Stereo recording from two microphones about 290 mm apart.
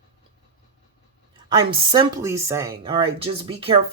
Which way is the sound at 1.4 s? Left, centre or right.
Centre.